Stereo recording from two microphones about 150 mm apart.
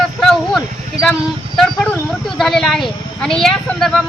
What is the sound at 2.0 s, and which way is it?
A woman's voice, centre (ahead or behind).